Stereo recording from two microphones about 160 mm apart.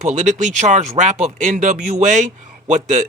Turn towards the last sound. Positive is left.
turn(degrees=-50)  # may be behind; listen again after turning